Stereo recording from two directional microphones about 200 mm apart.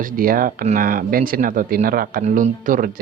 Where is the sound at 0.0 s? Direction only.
45° right (ahead or behind).